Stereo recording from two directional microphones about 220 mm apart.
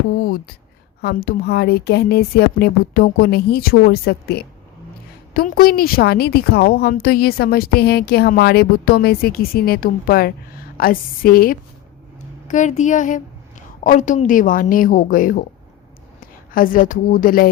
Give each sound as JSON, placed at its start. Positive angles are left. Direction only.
{"t": 0.1, "sound": "a woman's voice", "side_deg": 45}
{"t": 16.5, "sound": "speech", "side_deg": 40}